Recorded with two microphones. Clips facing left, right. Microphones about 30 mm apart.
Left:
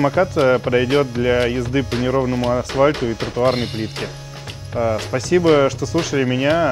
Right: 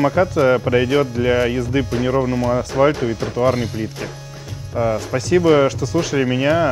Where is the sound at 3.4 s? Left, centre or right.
Left.